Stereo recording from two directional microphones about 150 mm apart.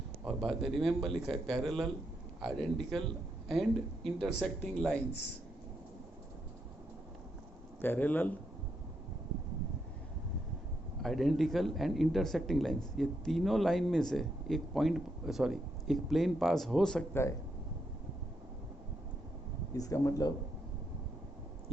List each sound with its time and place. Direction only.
0.3 s speech: centre (ahead or behind)
7.8 s speech: 10° left (ahead or behind)
11.0 s speech: centre (ahead or behind)
19.7 s speech: 20° left (ahead or behind)